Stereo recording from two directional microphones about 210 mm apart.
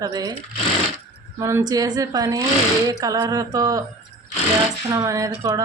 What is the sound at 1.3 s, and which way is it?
A woman's voice, 15° right (ahead or behind).